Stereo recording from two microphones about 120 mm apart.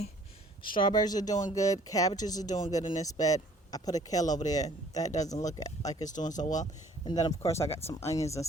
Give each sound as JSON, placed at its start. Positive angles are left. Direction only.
{"t": 0.6, "sound": "speech", "side_deg": 45}
{"t": 6.1, "sound": "speech", "side_deg": 90}
{"t": 7.0, "sound": "speech", "side_deg": 35}